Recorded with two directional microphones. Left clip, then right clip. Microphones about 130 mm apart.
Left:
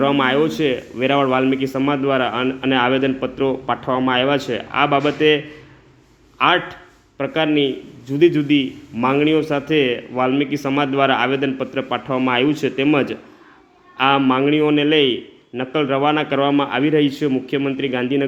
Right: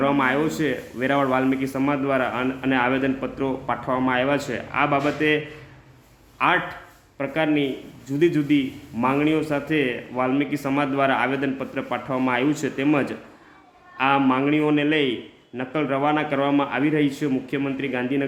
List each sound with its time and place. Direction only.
0.0 s a man's voice: 20° left (ahead or behind)
6.4 s a man's voice: 20° left (ahead or behind)